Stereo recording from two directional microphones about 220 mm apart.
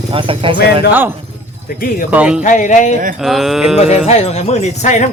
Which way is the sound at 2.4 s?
35° left (ahead or behind).